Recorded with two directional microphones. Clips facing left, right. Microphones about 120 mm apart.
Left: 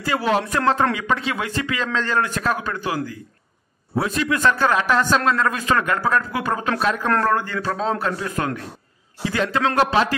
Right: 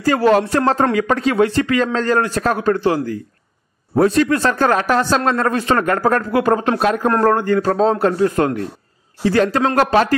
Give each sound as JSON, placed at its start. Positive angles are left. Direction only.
{"t": 0.0, "sound": "speech", "side_deg": -40}